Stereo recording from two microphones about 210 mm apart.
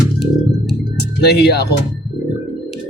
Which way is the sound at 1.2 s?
50° left (ahead or behind).